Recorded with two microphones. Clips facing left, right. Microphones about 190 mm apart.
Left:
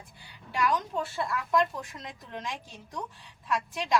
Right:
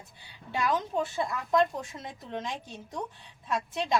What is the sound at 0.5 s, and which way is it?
A woman's voice, 25° right (ahead or behind).